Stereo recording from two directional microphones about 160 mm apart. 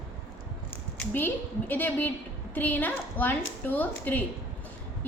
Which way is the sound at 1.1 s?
10° left (ahead or behind).